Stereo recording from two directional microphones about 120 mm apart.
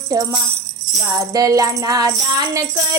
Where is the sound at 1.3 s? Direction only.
30° right (ahead or behind).